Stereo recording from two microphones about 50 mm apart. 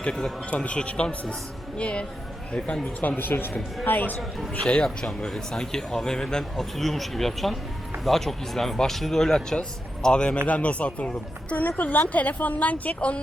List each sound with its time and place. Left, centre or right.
0.0 s a man's voice: centre
3.0 s a woman's voice: left
5.0 s speech: centre
10.4 s a woman's voice: left